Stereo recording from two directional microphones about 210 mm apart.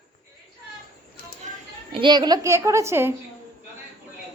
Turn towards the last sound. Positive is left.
turn(degrees=-10)  # may be behind; listen again after turning